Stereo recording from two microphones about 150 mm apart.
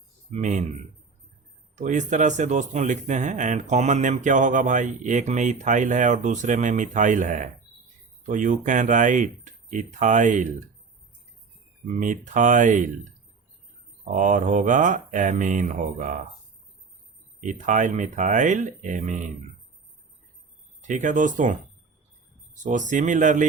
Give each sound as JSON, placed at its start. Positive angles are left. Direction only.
{"t": 0.3, "sound": "speech", "side_deg": -55}
{"t": 1.7, "sound": "a man's voice", "side_deg": -55}
{"t": 11.9, "sound": "a man's voice", "side_deg": -60}
{"t": 14.0, "sound": "a man's voice", "side_deg": -55}
{"t": 17.4, "sound": "a man's voice", "side_deg": -55}
{"t": 20.8, "sound": "a man's voice", "side_deg": -55}